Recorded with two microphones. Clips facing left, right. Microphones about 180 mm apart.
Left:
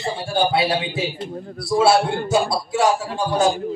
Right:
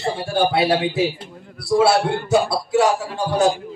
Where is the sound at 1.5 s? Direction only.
60° right (ahead or behind).